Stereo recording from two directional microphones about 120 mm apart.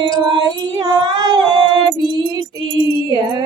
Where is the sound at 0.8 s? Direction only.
35° right (ahead or behind).